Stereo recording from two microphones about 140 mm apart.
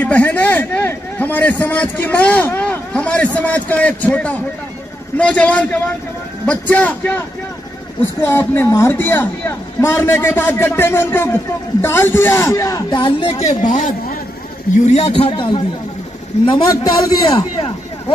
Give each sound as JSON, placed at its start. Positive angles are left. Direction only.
{"t": 0.0, "sound": "a man's voice", "side_deg": 10}
{"t": 13.0, "sound": "speech", "side_deg": 40}
{"t": 14.9, "sound": "a man's voice", "side_deg": 50}